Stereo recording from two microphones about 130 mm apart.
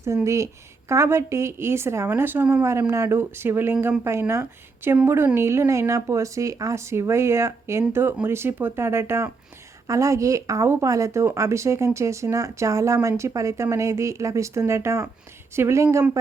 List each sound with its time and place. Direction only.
0.9 s a woman's voice: 20° right (ahead or behind)